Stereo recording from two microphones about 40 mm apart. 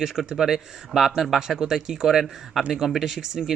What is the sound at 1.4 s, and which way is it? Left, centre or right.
Speech, centre.